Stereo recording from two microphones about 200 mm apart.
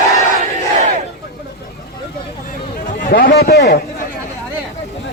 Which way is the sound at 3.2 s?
50° left (ahead or behind).